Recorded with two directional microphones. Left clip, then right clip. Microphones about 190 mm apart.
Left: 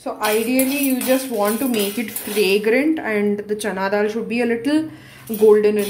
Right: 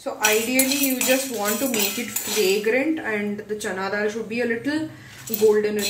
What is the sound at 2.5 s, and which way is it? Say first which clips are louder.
A woman's voice: left 5 dB; 55° left (ahead or behind).